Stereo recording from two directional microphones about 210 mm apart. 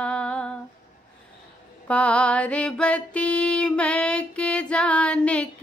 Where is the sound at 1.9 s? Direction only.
5° left (ahead or behind).